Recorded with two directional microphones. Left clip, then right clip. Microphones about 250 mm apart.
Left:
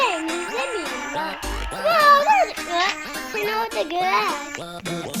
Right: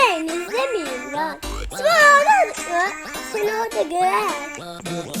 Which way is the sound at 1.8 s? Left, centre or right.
Right.